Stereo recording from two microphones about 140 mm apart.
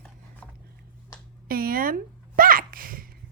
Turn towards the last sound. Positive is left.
turn(degrees=-90)